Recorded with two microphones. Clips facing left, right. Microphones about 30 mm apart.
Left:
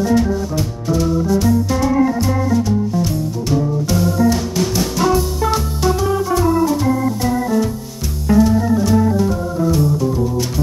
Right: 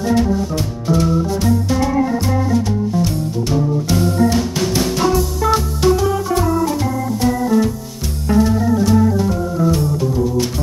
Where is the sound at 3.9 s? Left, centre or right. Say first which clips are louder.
Even; right.